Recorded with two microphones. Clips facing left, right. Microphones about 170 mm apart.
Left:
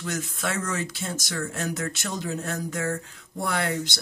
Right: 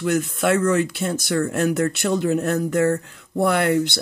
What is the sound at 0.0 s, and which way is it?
Speech, 60° right (ahead or behind).